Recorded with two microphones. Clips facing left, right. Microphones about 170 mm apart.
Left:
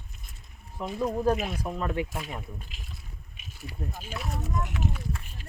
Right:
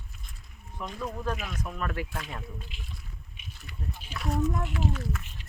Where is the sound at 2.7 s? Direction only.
45° left (ahead or behind).